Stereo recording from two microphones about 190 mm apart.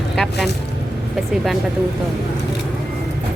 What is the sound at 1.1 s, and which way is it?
Speech, centre (ahead or behind).